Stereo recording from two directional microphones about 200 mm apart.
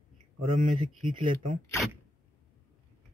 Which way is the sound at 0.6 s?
40° right (ahead or behind).